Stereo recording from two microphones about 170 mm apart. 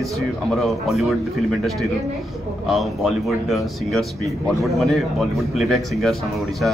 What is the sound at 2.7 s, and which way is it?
Speech, centre (ahead or behind).